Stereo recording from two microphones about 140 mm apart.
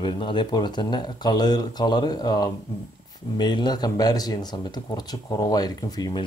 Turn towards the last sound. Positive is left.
turn(degrees=30)  # may be behind; listen again after turning